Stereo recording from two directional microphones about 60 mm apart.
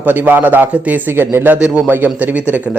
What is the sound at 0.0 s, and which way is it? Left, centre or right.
A man's voice, right.